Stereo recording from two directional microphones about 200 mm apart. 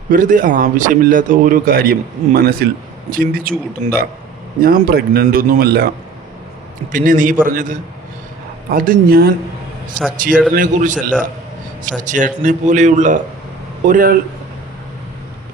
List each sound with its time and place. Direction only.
0.1 s speech: 40° right (ahead or behind)
4.6 s speech: 45° right (ahead or behind)
6.9 s speech: 40° right (ahead or behind)